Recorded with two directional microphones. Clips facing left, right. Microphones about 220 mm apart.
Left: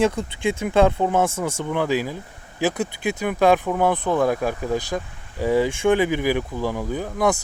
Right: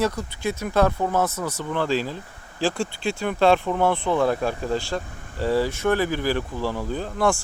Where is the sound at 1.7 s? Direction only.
15° left (ahead or behind).